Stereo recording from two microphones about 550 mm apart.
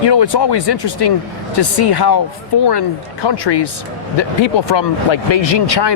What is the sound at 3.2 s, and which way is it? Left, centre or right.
Speech, left.